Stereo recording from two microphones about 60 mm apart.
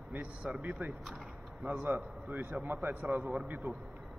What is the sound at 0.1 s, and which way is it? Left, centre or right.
A man's voice, right.